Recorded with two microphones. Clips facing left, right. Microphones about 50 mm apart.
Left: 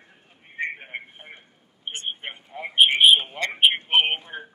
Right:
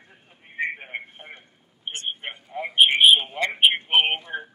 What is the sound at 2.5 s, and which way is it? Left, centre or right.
A man's voice, centre.